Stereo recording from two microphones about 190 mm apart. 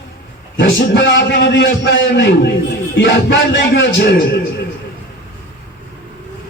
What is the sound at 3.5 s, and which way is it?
Speech, 70° left (ahead or behind).